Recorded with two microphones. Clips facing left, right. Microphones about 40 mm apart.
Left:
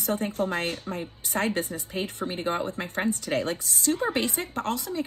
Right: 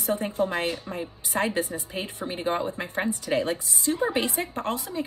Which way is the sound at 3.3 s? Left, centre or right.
Right.